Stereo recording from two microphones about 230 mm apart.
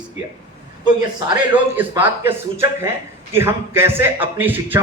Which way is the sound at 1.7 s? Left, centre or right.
Centre.